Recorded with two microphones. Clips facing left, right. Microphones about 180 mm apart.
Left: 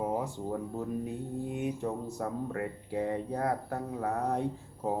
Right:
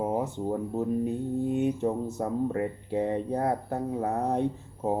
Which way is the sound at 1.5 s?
25° right (ahead or behind).